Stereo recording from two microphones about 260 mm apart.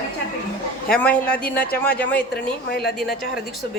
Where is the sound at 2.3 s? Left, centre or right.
Left.